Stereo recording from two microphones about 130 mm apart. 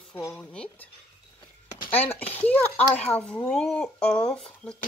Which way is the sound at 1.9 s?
15° left (ahead or behind).